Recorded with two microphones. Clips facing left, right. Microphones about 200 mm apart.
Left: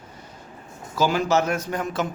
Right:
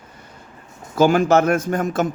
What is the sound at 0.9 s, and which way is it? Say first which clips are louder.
Speech: right 6 dB; 50° right (ahead or behind).